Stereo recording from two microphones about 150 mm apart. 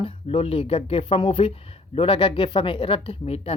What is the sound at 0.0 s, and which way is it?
Speech, 35° left (ahead or behind).